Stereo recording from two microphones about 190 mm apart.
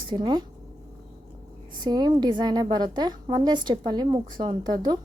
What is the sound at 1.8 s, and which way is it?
A woman's voice, 20° right (ahead or behind).